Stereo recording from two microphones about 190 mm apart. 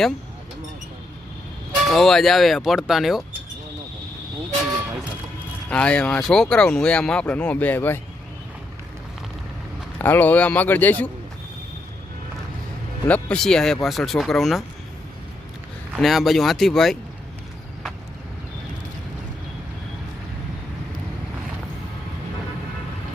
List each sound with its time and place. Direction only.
1.9 s speech: centre (ahead or behind)
5.7 s speech: 5° left (ahead or behind)
10.0 s a man's voice: 10° left (ahead or behind)
13.1 s speech: 5° left (ahead or behind)
16.0 s speech: centre (ahead or behind)